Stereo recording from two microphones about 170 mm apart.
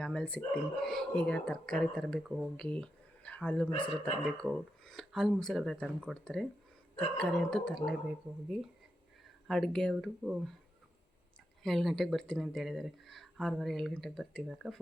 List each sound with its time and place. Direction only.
0.0 s speech: 5° left (ahead or behind)
11.6 s speech: centre (ahead or behind)